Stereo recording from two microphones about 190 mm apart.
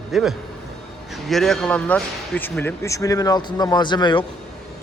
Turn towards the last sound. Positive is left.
turn(degrees=25)  # may be behind; listen again after turning